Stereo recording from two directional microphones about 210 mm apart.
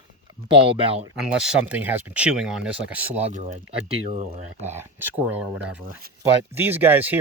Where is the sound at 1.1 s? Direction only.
5° right (ahead or behind).